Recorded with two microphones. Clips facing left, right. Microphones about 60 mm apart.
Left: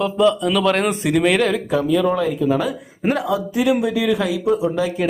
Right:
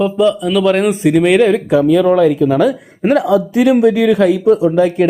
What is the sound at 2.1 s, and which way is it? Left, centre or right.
Speech, right.